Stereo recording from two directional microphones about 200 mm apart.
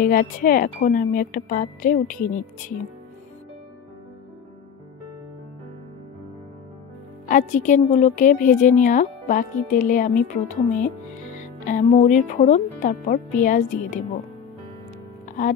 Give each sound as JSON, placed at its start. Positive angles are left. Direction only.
{"t": 0.0, "sound": "speech", "side_deg": 45}
{"t": 7.2, "sound": "a woman's voice", "side_deg": 40}
{"t": 11.3, "sound": "music", "side_deg": 40}
{"t": 11.9, "sound": "a woman's voice", "side_deg": 35}